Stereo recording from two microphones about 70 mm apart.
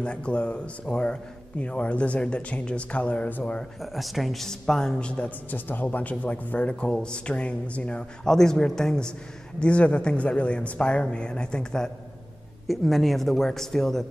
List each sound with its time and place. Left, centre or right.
0.0 s a man's voice: centre
3.8 s a man's voice: centre